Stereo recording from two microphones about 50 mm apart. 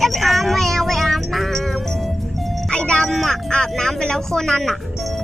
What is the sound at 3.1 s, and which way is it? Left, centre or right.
Speech, centre.